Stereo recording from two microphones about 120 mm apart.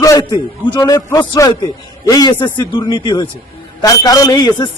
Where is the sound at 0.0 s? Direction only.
30° left (ahead or behind).